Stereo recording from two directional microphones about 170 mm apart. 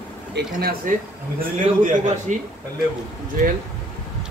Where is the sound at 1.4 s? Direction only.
45° right (ahead or behind).